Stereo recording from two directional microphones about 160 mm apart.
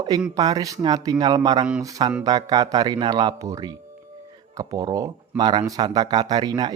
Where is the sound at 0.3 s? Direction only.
25° right (ahead or behind).